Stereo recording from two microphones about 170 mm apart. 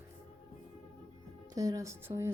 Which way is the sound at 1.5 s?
20° right (ahead or behind).